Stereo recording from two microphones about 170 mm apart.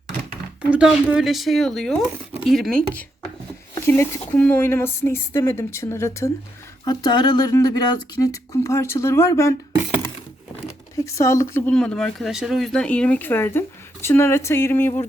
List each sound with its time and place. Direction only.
0.7 s speech: 5° right (ahead or behind)
3.8 s speech: 15° left (ahead or behind)
10.7 s speech: 15° left (ahead or behind)